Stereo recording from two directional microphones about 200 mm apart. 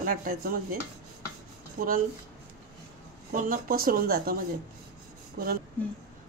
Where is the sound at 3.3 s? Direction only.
45° right (ahead or behind).